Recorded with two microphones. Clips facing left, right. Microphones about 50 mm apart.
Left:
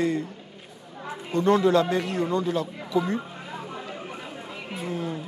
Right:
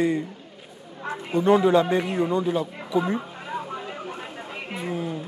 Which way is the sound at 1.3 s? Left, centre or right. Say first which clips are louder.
Right 2 dB; centre.